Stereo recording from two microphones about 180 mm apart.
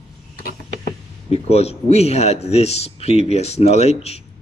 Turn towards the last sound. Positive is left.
turn(degrees=35)  # may be behind; listen again after turning